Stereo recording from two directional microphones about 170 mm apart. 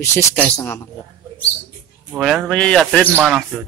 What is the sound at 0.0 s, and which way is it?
Speech, 15° left (ahead or behind).